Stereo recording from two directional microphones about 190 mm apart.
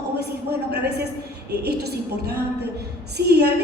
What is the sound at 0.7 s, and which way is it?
Speech, 60° right (ahead or behind).